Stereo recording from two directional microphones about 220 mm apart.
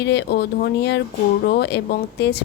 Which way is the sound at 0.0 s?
50° left (ahead or behind).